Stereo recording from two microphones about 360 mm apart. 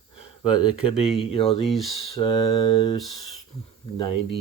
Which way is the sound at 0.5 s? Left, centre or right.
Centre.